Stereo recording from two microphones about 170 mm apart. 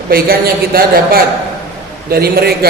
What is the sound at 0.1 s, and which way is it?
A man's voice, 60° right (ahead or behind).